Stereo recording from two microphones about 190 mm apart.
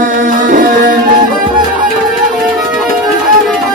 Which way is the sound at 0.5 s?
45° right (ahead or behind).